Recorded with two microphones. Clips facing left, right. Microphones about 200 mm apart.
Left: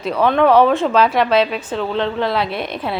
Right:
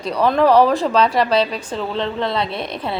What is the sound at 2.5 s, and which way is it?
Speech, 30° right (ahead or behind).